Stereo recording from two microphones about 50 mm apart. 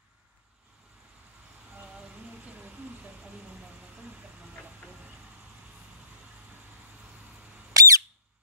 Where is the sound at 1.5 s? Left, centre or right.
Right.